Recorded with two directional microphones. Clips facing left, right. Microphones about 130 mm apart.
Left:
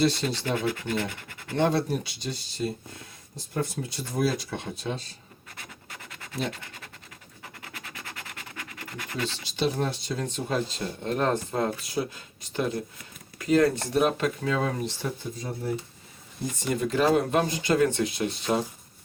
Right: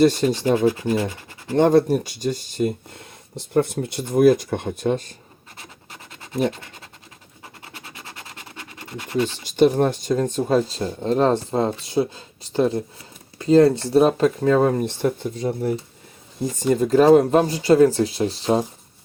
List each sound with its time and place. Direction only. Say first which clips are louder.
0.0 s speech: right 8 dB; 45° right (ahead or behind)
0.4 s speech: right 10 dB; 35° right (ahead or behind)
1.5 s speech: right 9 dB; 45° right (ahead or behind)
3.5 s speech: right 10 dB; 65° right (ahead or behind)
5.5 s scratch: right 2 dB; 25° right (ahead or behind)
9.4 s speech: right 11 dB; 50° right (ahead or behind); by 15.7 s 65° right (ahead or behind)
16.6 s speech: right 9 dB; 40° right (ahead or behind)